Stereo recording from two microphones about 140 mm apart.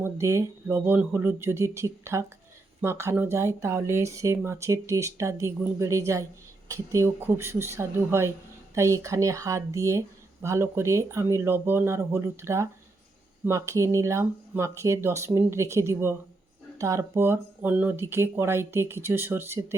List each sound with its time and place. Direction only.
0.0 s speech: 20° right (ahead or behind)